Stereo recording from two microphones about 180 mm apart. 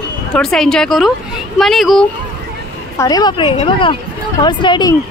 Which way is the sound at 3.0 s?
20° left (ahead or behind).